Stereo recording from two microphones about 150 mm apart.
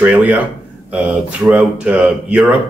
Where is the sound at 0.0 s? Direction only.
10° right (ahead or behind).